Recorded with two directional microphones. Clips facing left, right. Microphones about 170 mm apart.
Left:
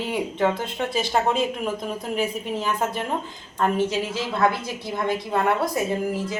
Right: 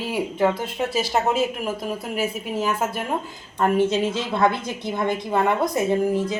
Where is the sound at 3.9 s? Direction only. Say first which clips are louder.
Right 3 dB; 20° right (ahead or behind).